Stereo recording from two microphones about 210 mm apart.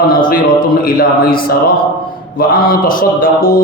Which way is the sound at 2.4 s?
40° left (ahead or behind).